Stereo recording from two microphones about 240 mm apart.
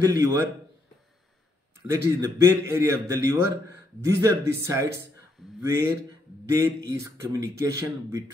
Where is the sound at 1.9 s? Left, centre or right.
Centre.